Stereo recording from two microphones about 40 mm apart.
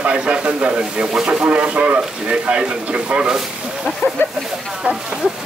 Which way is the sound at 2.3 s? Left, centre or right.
Right.